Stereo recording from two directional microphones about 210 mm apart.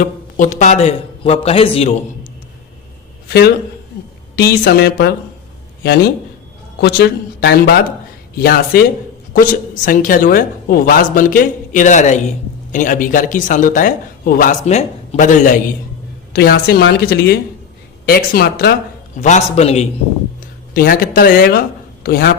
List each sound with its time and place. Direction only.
0.0 s speech: 35° left (ahead or behind)
3.2 s a woman's voice: 50° left (ahead or behind)
6.8 s a woman's voice: 50° left (ahead or behind)
16.3 s a woman's voice: 50° left (ahead or behind)
19.1 s speech: 35° left (ahead or behind)
20.7 s a woman's voice: 45° left (ahead or behind)